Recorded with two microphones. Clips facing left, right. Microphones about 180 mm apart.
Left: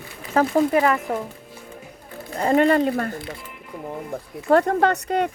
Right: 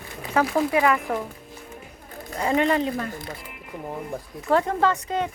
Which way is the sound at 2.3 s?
40° left (ahead or behind).